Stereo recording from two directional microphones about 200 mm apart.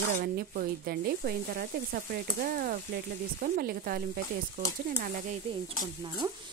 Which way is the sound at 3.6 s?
50° right (ahead or behind).